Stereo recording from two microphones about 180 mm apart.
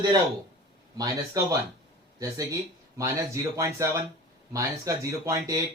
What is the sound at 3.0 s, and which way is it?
Speech, 15° right (ahead or behind).